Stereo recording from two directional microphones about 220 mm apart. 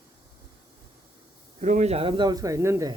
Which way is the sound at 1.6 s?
35° right (ahead or behind).